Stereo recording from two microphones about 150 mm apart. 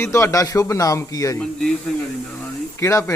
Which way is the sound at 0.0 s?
20° left (ahead or behind).